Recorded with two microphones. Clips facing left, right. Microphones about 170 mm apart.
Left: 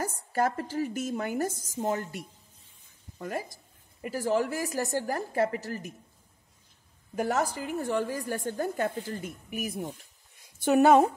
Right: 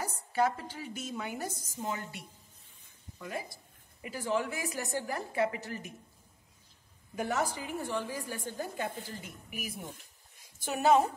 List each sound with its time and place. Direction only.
0.0 s a woman's voice: 50° left (ahead or behind)
7.2 s a woman's voice: 45° left (ahead or behind)